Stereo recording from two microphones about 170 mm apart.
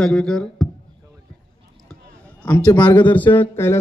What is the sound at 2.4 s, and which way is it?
A man's voice, 10° left (ahead or behind).